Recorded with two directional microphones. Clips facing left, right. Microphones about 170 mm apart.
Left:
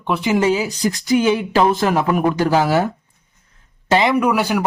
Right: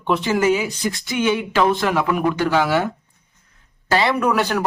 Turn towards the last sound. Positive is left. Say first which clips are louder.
# left 2 dB
turn(degrees=10)  # may be behind; listen again after turning